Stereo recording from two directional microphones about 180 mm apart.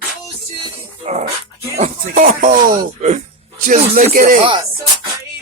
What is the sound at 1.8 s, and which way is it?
Speech, 45° right (ahead or behind).